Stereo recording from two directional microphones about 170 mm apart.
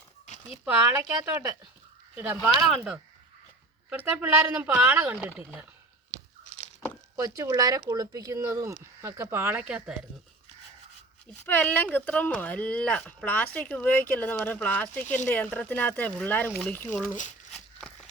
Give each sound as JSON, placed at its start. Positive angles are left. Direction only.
{"t": 0.5, "sound": "speech", "side_deg": -5}
{"t": 0.8, "sound": "speech", "side_deg": -15}
{"t": 7.2, "sound": "speech", "side_deg": -20}
{"t": 11.4, "sound": "speech", "side_deg": 10}
{"t": 17.5, "sound": "a sound", "side_deg": 5}